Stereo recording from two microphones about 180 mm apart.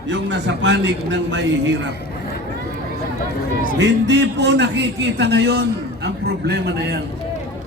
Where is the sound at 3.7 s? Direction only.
75° right (ahead or behind).